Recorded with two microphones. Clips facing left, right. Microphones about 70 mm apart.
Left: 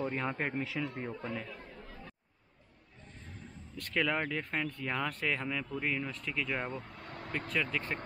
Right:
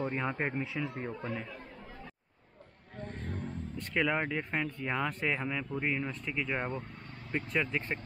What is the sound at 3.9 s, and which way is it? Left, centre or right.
A man's voice, centre.